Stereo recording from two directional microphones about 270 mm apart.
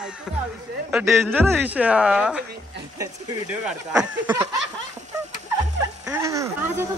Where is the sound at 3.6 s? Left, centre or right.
Centre.